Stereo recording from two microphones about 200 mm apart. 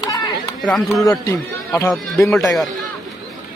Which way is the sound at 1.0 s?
15° left (ahead or behind).